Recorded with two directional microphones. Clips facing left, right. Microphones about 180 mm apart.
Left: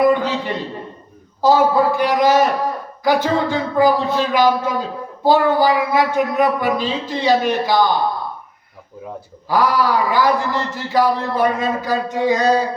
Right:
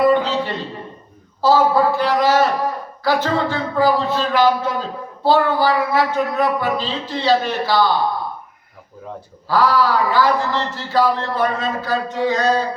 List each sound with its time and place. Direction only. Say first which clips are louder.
0.0 s a sound: even; 15° left (ahead or behind)
1.4 s speech: left 1 dB; 15° left (ahead or behind)
9.5 s speech: even; 15° left (ahead or behind)